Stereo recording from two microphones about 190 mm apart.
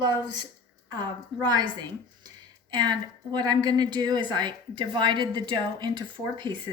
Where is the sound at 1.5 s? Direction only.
20° right (ahead or behind).